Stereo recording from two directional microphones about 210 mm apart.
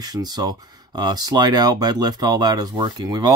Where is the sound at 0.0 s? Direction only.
20° right (ahead or behind).